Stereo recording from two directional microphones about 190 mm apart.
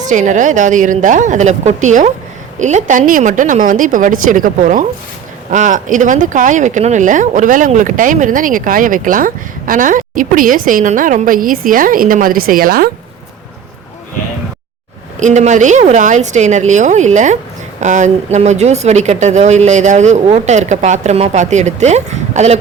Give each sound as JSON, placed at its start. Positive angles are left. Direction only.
{"t": 0.1, "sound": "speech", "side_deg": -40}
{"t": 15.2, "sound": "speech", "side_deg": -40}